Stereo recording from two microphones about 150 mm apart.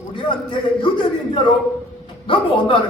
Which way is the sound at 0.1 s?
35° left (ahead or behind).